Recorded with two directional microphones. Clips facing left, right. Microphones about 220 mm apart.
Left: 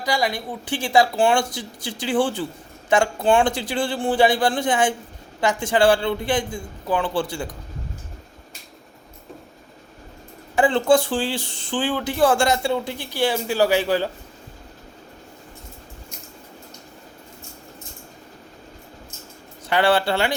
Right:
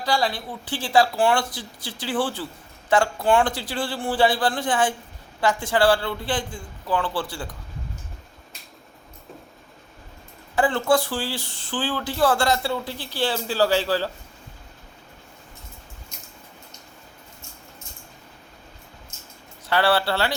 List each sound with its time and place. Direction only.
0.0 s speech: 15° left (ahead or behind)
10.5 s speech: 15° left (ahead or behind)
19.7 s speech: 15° left (ahead or behind)